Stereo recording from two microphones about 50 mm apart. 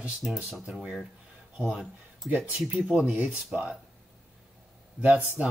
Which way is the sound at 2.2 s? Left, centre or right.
Right.